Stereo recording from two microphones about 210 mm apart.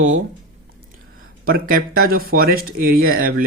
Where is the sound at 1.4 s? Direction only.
45° right (ahead or behind).